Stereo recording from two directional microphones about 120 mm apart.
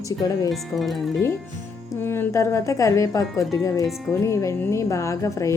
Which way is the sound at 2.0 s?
20° left (ahead or behind).